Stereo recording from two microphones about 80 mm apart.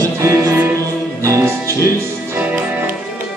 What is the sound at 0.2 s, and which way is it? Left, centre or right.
Music, right.